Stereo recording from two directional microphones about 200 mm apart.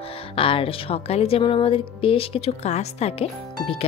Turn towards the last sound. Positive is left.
turn(degrees=30)  # may be behind; listen again after turning